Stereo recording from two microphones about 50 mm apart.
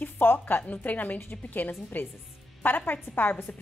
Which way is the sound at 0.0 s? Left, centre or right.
Left.